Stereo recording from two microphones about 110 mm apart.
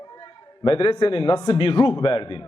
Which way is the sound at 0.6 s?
55° left (ahead or behind).